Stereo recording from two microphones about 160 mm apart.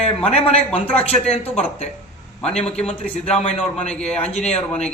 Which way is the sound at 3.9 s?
5° left (ahead or behind).